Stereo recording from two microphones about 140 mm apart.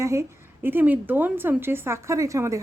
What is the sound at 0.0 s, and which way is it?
A woman's voice, 20° right (ahead or behind).